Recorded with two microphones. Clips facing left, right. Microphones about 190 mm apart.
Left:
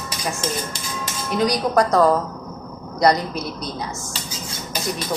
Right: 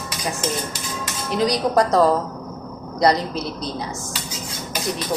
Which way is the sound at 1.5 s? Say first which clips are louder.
Right 1 dB; 25° right (ahead or behind).